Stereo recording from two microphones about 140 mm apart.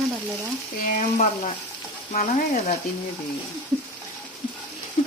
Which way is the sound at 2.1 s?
60° left (ahead or behind).